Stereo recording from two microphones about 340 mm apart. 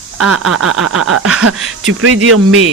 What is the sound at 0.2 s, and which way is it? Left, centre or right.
Speech, right.